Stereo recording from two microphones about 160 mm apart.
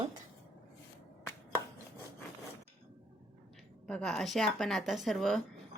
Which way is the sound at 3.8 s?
5° left (ahead or behind).